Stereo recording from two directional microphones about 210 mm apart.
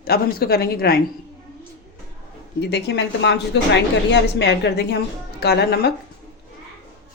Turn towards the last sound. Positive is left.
turn(degrees=50)  # may be behind; listen again after turning